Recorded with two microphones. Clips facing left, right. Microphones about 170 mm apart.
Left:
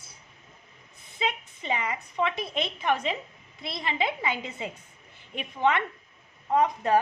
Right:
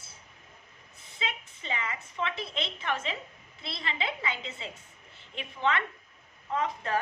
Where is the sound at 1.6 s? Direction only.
15° left (ahead or behind).